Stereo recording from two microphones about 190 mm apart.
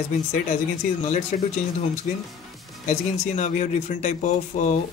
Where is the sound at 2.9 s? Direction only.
40° left (ahead or behind).